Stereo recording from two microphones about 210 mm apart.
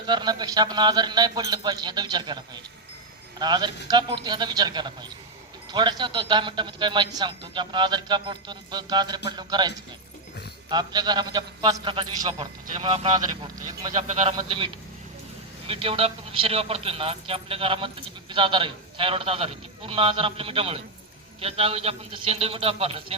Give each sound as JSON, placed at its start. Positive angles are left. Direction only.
{"t": 0.1, "sound": "a man's voice", "side_deg": -20}